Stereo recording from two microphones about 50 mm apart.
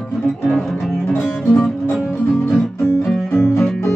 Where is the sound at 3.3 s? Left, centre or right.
Centre.